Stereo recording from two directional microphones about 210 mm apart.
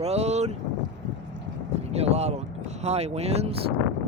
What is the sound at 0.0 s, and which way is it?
Speech, 30° right (ahead or behind).